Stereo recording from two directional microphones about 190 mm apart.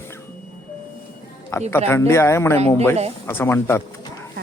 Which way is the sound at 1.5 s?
15° left (ahead or behind).